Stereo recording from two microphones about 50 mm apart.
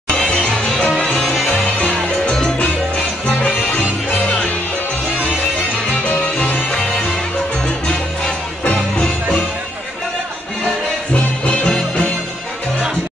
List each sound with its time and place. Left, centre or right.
0.1 s music: centre
1.8 s music: left
3.3 s music: left
6.3 s music: left
11.1 s music: left